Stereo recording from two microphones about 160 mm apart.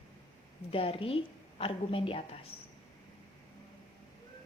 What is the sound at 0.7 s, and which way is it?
A woman's voice, 35° left (ahead or behind).